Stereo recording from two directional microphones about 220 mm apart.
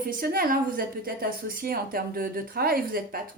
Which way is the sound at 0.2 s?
40° right (ahead or behind).